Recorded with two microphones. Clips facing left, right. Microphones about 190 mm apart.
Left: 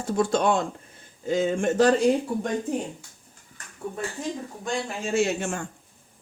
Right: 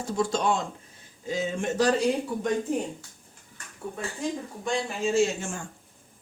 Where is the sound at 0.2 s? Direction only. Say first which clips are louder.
Left 3 dB; 55° left (ahead or behind).